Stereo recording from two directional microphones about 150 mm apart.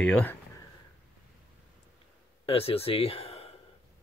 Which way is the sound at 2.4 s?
40° left (ahead or behind).